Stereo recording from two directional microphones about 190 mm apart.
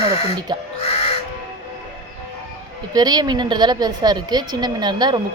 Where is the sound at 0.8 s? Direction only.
30° left (ahead or behind).